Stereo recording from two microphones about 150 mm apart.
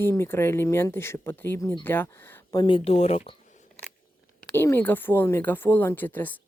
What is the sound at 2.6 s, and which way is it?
Speech, 35° left (ahead or behind).